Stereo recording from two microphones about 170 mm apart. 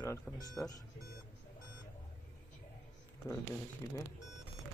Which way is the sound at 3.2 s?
20° left (ahead or behind).